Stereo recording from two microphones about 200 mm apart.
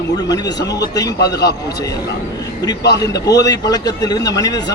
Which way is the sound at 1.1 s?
55° left (ahead or behind).